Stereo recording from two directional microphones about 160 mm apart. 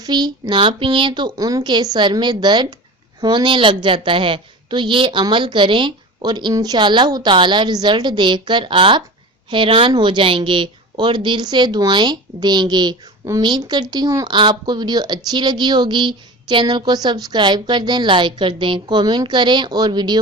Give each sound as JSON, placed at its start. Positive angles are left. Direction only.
{"t": 0.0, "sound": "a woman's voice", "side_deg": -25}